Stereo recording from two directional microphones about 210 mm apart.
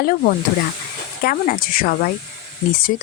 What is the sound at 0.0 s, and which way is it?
Speech, 40° left (ahead or behind).